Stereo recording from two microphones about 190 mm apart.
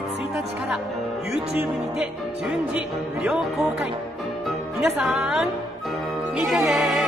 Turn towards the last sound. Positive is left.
turn(degrees=0)  # may be behind; listen again after turning